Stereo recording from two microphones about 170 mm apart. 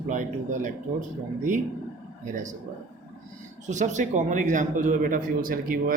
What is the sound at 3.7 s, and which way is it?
A man's voice, 45° right (ahead or behind).